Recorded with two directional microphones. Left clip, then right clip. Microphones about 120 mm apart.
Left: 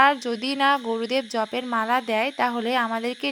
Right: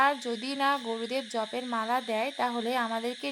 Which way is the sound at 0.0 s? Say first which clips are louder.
Left 7 dB; 35° left (ahead or behind).